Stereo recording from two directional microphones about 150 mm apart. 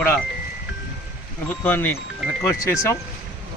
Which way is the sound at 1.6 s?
15° left (ahead or behind).